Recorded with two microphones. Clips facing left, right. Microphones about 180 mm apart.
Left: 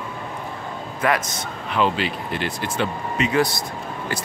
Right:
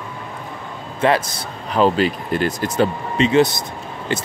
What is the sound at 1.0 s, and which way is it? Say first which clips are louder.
Speech: right 5 dB; 30° right (ahead or behind).